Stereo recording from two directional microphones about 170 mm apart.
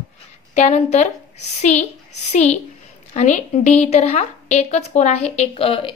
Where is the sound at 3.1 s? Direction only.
45° left (ahead or behind).